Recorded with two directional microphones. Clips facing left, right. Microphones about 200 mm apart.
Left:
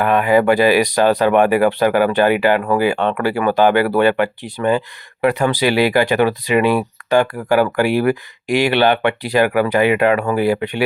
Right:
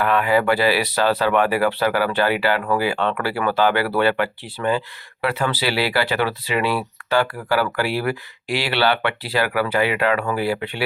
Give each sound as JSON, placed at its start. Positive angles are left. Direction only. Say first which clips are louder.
{"t": 0.0, "sound": "speech", "louder": "left 4 dB", "side_deg": 20}